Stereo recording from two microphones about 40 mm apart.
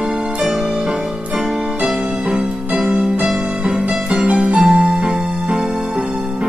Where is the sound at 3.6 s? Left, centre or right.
Right.